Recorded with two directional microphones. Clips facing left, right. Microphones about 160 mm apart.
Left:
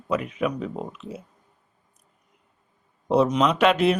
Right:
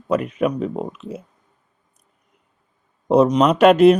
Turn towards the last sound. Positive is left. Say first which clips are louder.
# right 8 dB
turn(degrees=-45)  # may be behind; listen again after turning